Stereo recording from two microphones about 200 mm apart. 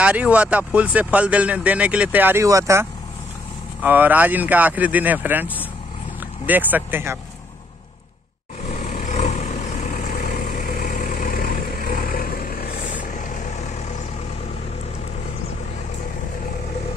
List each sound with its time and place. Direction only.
0.0 s speech: 5° right (ahead or behind)
8.6 s vehicle: 35° left (ahead or behind)